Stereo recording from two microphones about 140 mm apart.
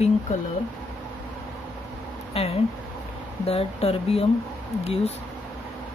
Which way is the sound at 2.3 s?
45° left (ahead or behind).